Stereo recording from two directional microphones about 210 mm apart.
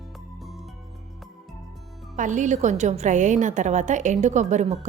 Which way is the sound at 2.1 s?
35° right (ahead or behind).